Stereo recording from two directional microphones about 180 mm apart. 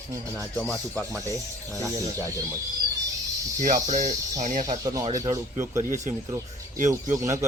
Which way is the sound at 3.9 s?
45° right (ahead or behind).